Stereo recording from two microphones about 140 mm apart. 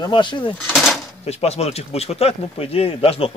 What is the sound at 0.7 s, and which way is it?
Drawer open or close, centre (ahead or behind).